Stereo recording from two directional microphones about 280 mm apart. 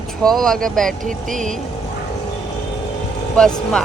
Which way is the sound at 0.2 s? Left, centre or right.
Centre.